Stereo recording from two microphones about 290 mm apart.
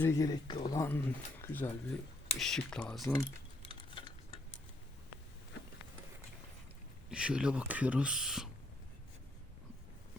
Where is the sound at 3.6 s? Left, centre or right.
Centre.